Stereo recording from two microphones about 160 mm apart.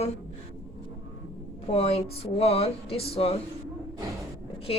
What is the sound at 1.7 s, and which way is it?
A woman's voice, 40° left (ahead or behind).